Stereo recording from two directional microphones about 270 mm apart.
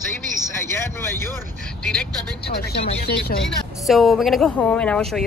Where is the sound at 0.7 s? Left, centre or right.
Centre.